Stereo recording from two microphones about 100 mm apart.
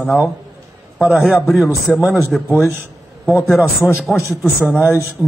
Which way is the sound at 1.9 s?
20° right (ahead or behind).